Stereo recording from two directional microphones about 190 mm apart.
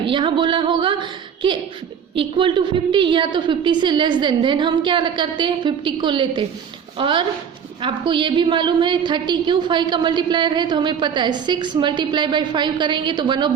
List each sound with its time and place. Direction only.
0.1 s a woman's voice: 25° right (ahead or behind)